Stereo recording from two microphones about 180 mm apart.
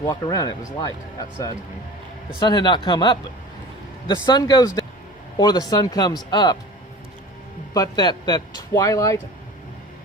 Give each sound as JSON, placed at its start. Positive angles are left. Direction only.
{"t": 0.0, "sound": "speech", "side_deg": 20}
{"t": 2.4, "sound": "speech", "side_deg": 25}
{"t": 7.7, "sound": "speech", "side_deg": 20}